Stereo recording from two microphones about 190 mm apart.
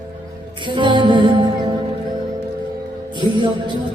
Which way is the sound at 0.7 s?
25° right (ahead or behind).